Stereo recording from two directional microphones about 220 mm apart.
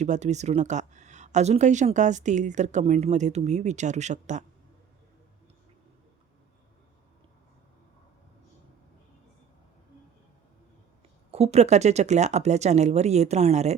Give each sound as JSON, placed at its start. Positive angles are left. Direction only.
{"t": 0.0, "sound": "speech", "side_deg": -30}
{"t": 11.3, "sound": "speech", "side_deg": -30}